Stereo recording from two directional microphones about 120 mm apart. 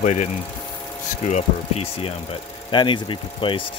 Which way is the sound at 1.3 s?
65° left (ahead or behind).